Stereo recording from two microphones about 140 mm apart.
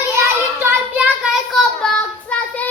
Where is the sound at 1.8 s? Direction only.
10° left (ahead or behind).